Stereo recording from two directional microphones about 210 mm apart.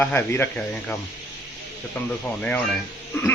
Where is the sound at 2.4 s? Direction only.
5° left (ahead or behind).